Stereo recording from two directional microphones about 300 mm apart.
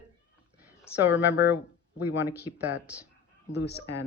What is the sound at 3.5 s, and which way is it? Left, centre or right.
Speech, left.